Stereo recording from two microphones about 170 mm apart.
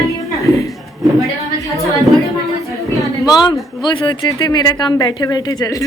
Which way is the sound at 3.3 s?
20° left (ahead or behind).